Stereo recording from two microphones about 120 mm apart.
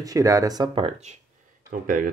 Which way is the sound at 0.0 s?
30° right (ahead or behind).